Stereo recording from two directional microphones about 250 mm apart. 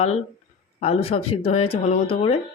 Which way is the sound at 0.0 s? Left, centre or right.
Left.